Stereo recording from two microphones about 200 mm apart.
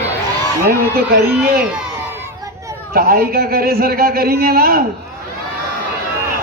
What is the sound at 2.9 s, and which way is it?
A man's voice, 50° right (ahead or behind).